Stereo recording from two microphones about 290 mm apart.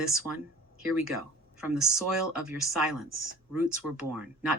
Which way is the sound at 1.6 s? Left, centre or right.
Centre.